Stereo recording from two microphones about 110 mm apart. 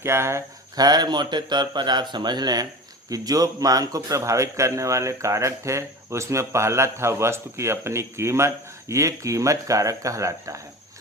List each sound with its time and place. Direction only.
0.0 s a man's voice: 25° right (ahead or behind)
0.8 s a man's voice: 40° right (ahead or behind)